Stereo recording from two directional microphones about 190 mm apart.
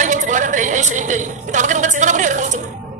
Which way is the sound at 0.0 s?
40° right (ahead or behind).